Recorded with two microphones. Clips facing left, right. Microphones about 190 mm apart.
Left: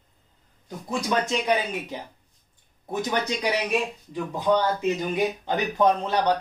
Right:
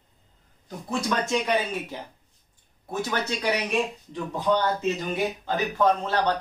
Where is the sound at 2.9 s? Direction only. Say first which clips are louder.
Left 2 dB; 15° left (ahead or behind).